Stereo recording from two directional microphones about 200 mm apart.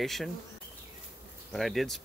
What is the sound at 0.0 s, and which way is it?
Speech, centre (ahead or behind).